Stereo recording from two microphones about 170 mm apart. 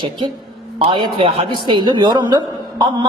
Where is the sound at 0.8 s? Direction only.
30° right (ahead or behind).